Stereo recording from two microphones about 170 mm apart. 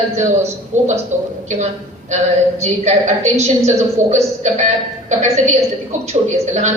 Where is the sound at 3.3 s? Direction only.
40° right (ahead or behind).